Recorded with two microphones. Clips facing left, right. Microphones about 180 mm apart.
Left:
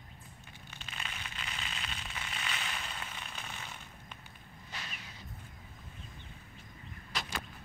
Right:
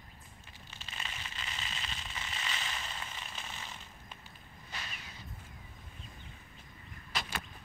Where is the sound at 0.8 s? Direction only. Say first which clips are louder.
Even; centre (ahead or behind).